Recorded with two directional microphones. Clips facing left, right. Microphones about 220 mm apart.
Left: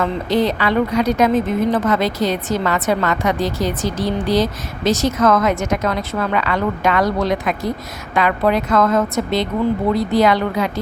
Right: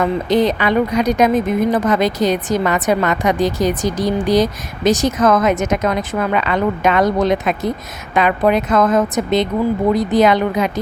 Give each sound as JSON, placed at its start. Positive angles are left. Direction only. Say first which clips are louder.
{"t": 0.0, "sound": "a woman's voice", "louder": "right 3 dB", "side_deg": -15}